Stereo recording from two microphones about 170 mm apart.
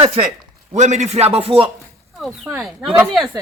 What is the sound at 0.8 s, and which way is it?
Speech, 40° right (ahead or behind).